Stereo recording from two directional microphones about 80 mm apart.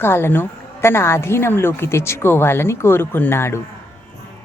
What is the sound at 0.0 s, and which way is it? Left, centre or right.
A woman's voice, left.